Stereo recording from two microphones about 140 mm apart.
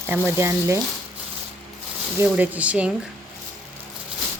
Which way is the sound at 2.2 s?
10° right (ahead or behind).